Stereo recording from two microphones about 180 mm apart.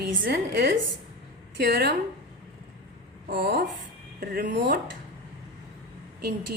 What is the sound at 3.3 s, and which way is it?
A woman's voice, 55° right (ahead or behind).